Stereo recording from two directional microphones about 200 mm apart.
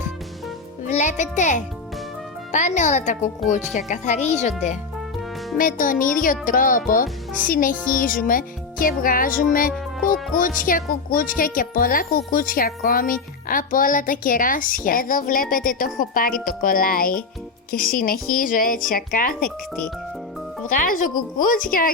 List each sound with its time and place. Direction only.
0.9 s speech: 35° left (ahead or behind)
20.7 s speech: 45° left (ahead or behind)